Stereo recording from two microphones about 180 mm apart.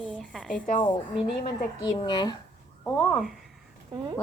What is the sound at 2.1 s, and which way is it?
Speech, 25° left (ahead or behind).